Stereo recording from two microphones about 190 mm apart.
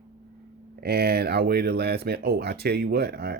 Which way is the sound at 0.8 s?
55° right (ahead or behind).